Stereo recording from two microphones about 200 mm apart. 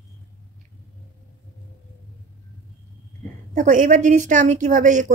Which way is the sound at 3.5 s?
40° right (ahead or behind).